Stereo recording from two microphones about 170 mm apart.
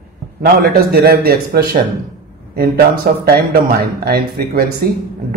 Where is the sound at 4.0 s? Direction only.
65° right (ahead or behind).